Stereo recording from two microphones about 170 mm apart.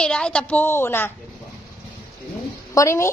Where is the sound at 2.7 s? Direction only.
15° left (ahead or behind).